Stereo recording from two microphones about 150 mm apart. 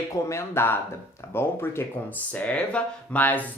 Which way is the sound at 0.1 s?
20° left (ahead or behind).